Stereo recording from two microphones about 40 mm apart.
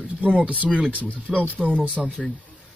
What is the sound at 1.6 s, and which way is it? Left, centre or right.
Speech, right.